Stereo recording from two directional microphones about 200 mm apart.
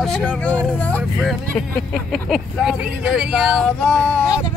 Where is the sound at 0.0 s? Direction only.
5° left (ahead or behind).